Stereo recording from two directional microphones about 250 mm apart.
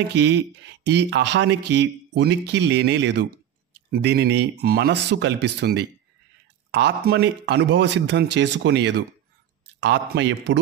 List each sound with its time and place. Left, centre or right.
0.1 s speech: right